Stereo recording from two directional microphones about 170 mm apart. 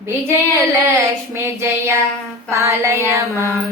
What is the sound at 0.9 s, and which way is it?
Child singing, 15° right (ahead or behind).